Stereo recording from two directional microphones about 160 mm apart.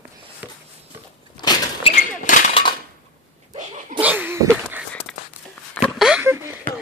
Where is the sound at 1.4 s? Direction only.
25° left (ahead or behind).